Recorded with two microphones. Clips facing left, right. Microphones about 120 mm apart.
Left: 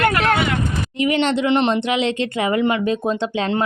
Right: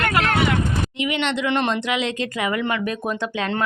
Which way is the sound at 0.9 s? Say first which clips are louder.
Left 8 dB; 35° left (ahead or behind).